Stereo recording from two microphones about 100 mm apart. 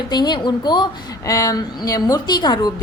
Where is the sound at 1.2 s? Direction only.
35° left (ahead or behind).